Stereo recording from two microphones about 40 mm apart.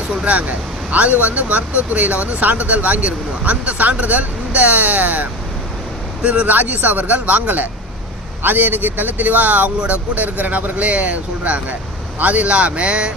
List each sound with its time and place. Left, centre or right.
0.1 s speech: right
8.4 s speech: right
10.8 s speech: right